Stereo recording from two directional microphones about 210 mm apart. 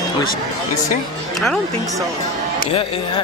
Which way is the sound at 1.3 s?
Centre (ahead or behind).